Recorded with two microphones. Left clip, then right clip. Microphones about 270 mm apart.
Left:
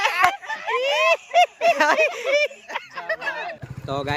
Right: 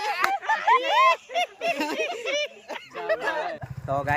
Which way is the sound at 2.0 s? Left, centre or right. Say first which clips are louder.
Left 8 dB; left.